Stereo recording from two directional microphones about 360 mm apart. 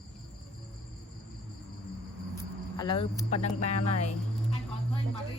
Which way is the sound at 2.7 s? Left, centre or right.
Centre.